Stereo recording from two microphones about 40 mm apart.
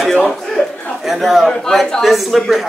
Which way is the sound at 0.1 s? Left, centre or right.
Centre.